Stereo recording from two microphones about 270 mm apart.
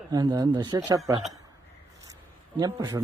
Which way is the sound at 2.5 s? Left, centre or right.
Centre.